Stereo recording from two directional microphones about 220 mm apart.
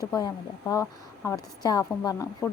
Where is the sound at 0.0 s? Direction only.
15° left (ahead or behind).